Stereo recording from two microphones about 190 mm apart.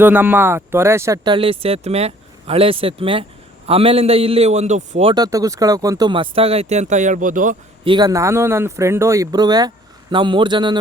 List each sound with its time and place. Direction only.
0.0 s a man's voice: 10° right (ahead or behind); by 5.1 s 35° right (ahead or behind)
5.1 s speech: 20° right (ahead or behind); by 7.5 s 45° right (ahead or behind)
7.9 s speech: 20° right (ahead or behind)